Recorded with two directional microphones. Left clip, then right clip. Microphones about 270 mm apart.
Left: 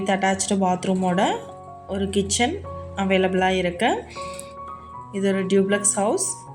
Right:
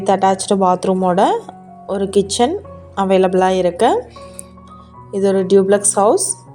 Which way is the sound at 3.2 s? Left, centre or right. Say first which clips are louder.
Right 7 dB; right.